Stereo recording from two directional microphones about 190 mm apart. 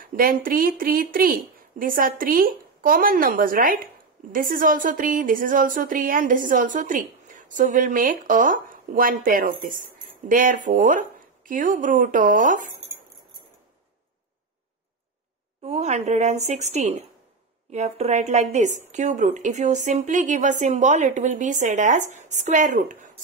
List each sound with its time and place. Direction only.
0.0 s speech: 50° right (ahead or behind)
15.6 s a woman's voice: 35° right (ahead or behind)